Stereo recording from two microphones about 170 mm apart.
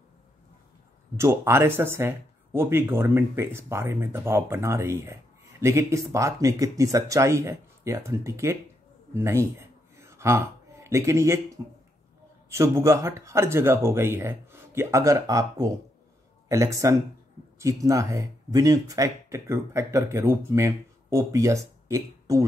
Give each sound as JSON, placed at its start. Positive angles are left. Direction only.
{"t": 1.1, "sound": "speech", "side_deg": -15}